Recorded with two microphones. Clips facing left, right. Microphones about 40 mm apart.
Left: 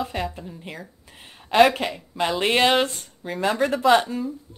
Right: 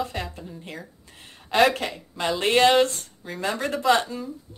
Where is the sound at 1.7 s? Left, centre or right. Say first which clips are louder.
Left 3 dB; centre.